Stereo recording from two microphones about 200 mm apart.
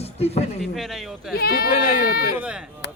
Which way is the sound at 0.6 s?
Centre (ahead or behind).